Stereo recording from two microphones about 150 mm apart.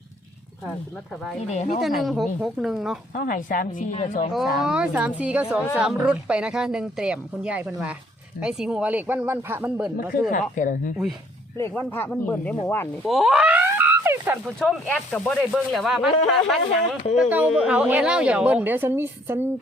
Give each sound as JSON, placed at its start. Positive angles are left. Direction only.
{"t": 1.5, "sound": "speech", "side_deg": 50}
{"t": 1.8, "sound": "speech", "side_deg": 0}
{"t": 3.2, "sound": "a woman's voice", "side_deg": 70}
{"t": 3.9, "sound": "speech", "side_deg": 50}
{"t": 4.3, "sound": "a woman's voice", "side_deg": 0}
{"t": 10.5, "sound": "a woman's voice", "side_deg": 60}
{"t": 11.7, "sound": "speech", "side_deg": 10}
{"t": 13.1, "sound": "a sound", "side_deg": 0}
{"t": 14.4, "sound": "a woman's voice", "side_deg": 0}